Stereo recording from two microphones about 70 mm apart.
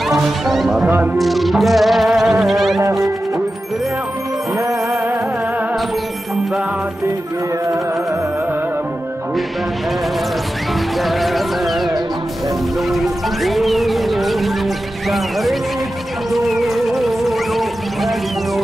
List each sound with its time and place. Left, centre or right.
0.0 s speech: centre
0.8 s speech: right
1.1 s music: centre
4.6 s music: right
10.7 s music: centre